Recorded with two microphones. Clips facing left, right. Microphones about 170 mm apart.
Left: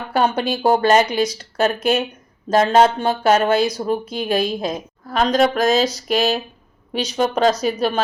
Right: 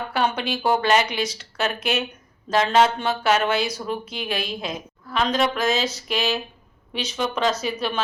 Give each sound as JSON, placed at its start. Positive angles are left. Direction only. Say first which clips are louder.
{"t": 0.1, "sound": "a woman's voice", "louder": "left 7 dB", "side_deg": 45}